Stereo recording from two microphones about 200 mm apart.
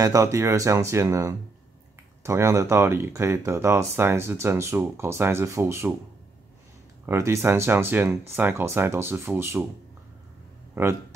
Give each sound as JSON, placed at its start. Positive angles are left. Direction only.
{"t": 0.0, "sound": "speech", "side_deg": -15}
{"t": 7.1, "sound": "speech", "side_deg": -15}
{"t": 10.7, "sound": "speech", "side_deg": -10}